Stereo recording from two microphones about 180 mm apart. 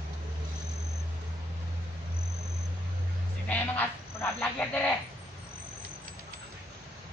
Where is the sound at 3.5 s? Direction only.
10° left (ahead or behind).